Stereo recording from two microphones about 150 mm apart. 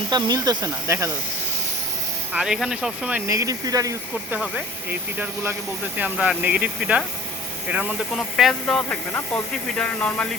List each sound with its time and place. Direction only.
0.1 s speech: 25° right (ahead or behind)
2.3 s speech: 5° right (ahead or behind)
3.2 s speech: 20° right (ahead or behind)
4.3 s speech: 10° right (ahead or behind); by 10.2 s 5° left (ahead or behind)